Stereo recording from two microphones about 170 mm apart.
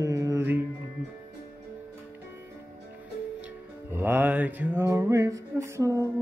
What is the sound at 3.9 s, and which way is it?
Music, 10° right (ahead or behind).